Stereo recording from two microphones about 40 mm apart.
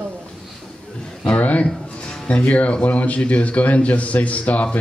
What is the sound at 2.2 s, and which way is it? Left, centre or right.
Speech, left.